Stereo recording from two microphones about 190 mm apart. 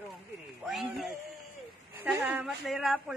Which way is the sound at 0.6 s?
Centre (ahead or behind).